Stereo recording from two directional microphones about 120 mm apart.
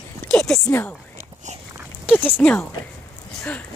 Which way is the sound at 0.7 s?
15° left (ahead or behind).